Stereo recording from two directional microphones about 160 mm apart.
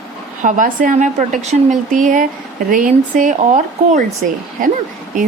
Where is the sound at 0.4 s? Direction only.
55° right (ahead or behind).